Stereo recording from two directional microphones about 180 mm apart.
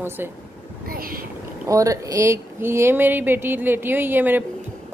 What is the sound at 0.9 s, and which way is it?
Speech, 55° right (ahead or behind).